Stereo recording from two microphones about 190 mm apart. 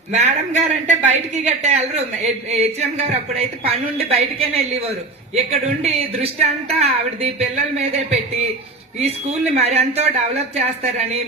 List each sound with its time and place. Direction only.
0.1 s a woman's voice: 40° right (ahead or behind)
9.6 s a woman's voice: 35° right (ahead or behind)